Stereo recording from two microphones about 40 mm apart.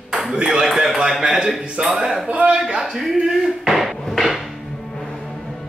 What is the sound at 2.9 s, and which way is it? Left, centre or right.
Dishes, centre.